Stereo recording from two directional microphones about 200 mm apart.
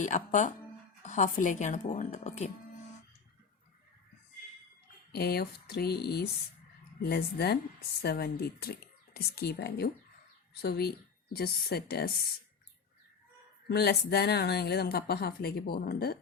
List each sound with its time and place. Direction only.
0.0 s speech: 40° left (ahead or behind)
5.1 s speech: 50° left (ahead or behind)
13.7 s speech: 55° left (ahead or behind)